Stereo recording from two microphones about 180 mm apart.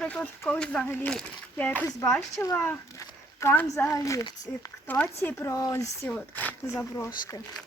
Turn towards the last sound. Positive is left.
turn(degrees=15)  # may be behind; listen again after turning